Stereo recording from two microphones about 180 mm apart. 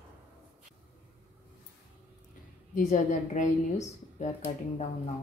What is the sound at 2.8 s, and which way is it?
Speech, 45° left (ahead or behind).